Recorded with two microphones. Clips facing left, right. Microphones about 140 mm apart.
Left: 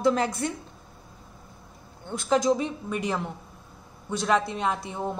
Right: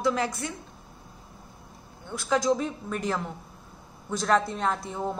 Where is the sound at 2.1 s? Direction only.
20° left (ahead or behind).